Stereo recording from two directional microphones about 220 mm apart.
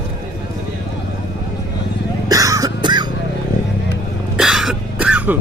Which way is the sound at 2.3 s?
15° right (ahead or behind).